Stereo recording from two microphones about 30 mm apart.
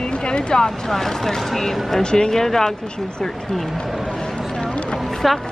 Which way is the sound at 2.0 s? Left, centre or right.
Left.